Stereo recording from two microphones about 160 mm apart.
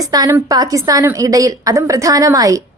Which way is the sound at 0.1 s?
20° right (ahead or behind).